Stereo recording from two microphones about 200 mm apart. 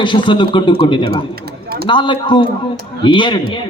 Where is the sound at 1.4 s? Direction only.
50° right (ahead or behind).